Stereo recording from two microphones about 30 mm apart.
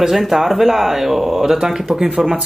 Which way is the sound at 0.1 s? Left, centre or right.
Centre.